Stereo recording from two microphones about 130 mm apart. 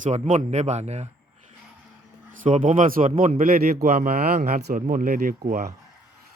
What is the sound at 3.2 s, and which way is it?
Speech, 60° right (ahead or behind).